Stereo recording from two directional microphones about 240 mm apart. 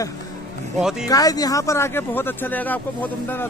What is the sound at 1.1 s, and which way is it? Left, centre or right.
Speech, centre.